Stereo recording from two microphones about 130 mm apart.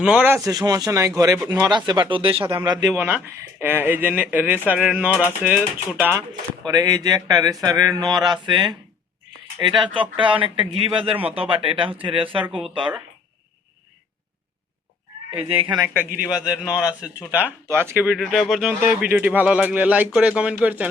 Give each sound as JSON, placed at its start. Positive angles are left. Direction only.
{"t": 0.0, "sound": "speech", "side_deg": -10}
{"t": 0.4, "sound": "speech", "side_deg": -30}
{"t": 2.4, "sound": "speech", "side_deg": -15}
{"t": 6.7, "sound": "speech", "side_deg": -30}
{"t": 15.3, "sound": "speech", "side_deg": -45}
{"t": 16.2, "sound": "a man's voice", "side_deg": -5}